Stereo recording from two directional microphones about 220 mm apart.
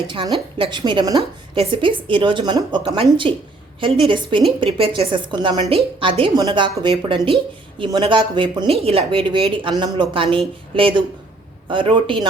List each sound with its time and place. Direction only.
0.1 s a woman's voice: 20° right (ahead or behind)